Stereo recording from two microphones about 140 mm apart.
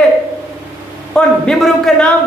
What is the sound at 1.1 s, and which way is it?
Speech, 5° left (ahead or behind).